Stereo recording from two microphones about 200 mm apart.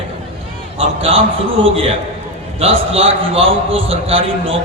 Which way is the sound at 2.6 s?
30° right (ahead or behind).